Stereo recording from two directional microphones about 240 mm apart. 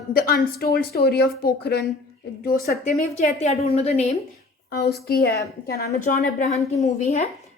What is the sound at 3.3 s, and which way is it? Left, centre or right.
Speech, left.